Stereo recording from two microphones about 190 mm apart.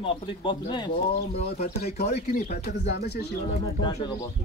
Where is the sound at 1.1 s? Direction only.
55° left (ahead or behind).